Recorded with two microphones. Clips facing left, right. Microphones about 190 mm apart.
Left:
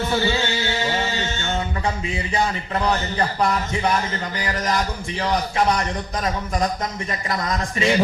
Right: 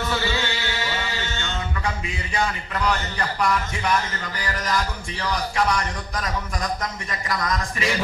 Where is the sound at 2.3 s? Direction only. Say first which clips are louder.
Left 2 dB; 30° left (ahead or behind).